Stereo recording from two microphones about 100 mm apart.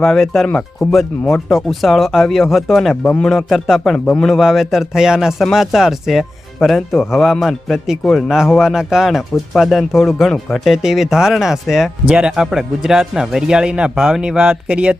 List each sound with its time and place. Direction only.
0.0 s speech: centre (ahead or behind)
3.3 s speech: 5° right (ahead or behind)